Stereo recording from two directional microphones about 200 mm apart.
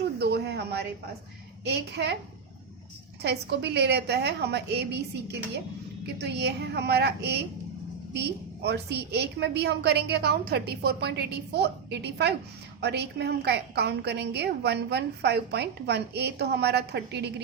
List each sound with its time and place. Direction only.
0.2 s a sound: 55° right (ahead or behind)
1.6 s a woman's voice: 55° right (ahead or behind)
3.2 s a woman's voice: 55° right (ahead or behind)